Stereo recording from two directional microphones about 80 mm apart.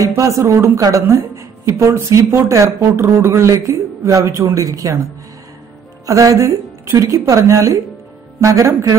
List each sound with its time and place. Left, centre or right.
0.0 s a woman's voice: right
6.0 s a woman's voice: right